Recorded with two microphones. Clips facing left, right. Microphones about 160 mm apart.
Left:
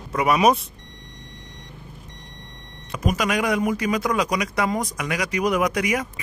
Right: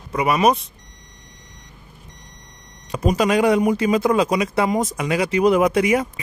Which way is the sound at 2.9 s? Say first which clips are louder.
Right 5 dB; 30° right (ahead or behind).